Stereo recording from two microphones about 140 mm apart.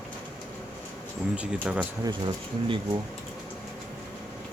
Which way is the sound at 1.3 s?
10° right (ahead or behind).